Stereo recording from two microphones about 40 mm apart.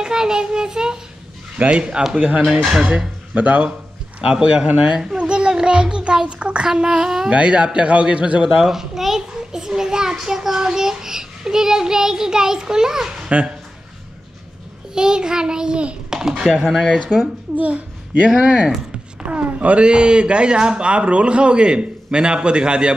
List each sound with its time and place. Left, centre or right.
0.0 s a child's voice: centre
1.6 s a man's voice: right
5.1 s a sound: right
6.8 s speech: centre
7.2 s a man's voice: right
8.5 s a child's voice: centre
13.3 s speech: right
15.0 s a man's voice: centre
16.1 s a sound: centre
16.6 s speech: centre
17.6 s a child's voice: right
19.8 s a man's voice: right